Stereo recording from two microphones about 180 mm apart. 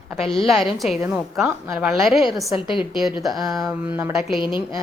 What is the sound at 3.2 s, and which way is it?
Speech, centre (ahead or behind).